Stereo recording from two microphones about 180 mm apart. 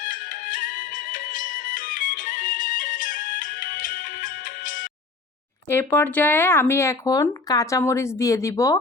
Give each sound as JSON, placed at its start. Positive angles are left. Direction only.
{"t": 0.0, "sound": "music", "side_deg": 50}
{"t": 5.6, "sound": "speech", "side_deg": 10}